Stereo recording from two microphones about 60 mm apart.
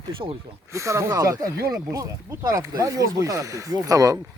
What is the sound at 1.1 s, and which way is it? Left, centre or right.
Speech, right.